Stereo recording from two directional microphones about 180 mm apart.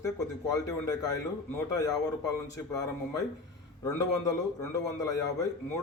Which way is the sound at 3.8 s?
20° left (ahead or behind).